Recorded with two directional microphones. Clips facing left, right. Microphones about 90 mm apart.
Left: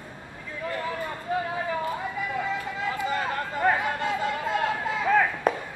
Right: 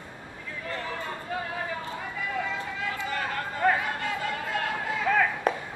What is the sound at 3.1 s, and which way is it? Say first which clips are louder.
Chatter: left 3 dB; 20° left (ahead or behind).